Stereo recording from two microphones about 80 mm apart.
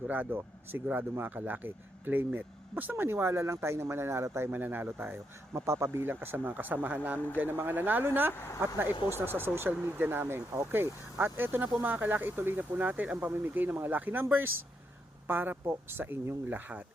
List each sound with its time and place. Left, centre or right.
0.1 s speech: right